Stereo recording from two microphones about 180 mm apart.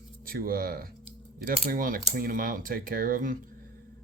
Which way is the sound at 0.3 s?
55° right (ahead or behind).